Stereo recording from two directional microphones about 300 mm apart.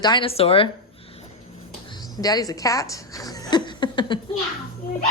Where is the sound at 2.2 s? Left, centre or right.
Centre.